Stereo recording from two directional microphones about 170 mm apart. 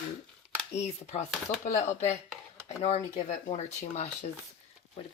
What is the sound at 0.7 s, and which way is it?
Speech, 40° left (ahead or behind).